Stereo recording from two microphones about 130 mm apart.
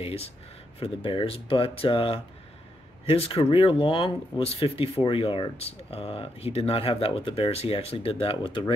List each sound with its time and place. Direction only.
0.0 s speech: 50° left (ahead or behind)